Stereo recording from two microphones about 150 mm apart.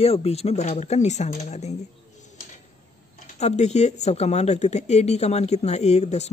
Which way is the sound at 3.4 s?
50° left (ahead or behind).